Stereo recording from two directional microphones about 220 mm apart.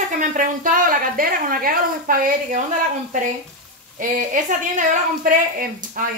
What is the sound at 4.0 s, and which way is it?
Speech, 35° right (ahead or behind).